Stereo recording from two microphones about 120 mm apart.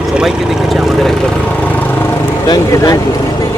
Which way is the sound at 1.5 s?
15° left (ahead or behind).